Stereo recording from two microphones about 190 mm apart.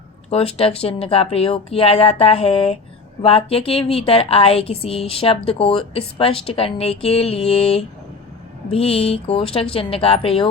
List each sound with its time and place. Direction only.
0.3 s a woman's voice: 30° left (ahead or behind)